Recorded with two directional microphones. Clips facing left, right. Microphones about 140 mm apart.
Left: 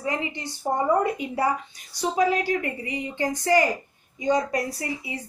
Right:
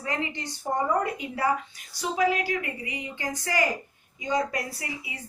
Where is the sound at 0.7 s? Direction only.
25° left (ahead or behind).